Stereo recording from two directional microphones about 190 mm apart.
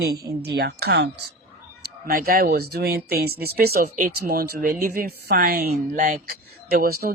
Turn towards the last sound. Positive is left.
turn(degrees=-50)  # may be behind; listen again after turning